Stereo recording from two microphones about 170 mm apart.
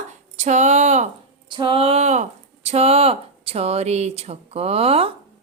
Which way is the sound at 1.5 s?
30° right (ahead or behind).